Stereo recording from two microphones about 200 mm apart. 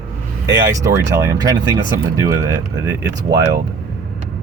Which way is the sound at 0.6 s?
15° right (ahead or behind).